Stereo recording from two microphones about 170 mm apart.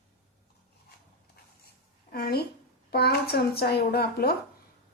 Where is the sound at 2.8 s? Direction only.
70° left (ahead or behind).